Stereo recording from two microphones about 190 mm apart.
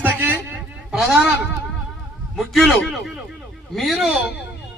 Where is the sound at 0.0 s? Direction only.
10° right (ahead or behind).